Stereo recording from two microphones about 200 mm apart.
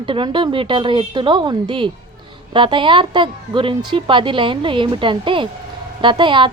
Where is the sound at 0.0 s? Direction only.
25° right (ahead or behind).